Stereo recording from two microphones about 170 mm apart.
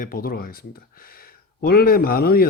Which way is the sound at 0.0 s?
60° left (ahead or behind).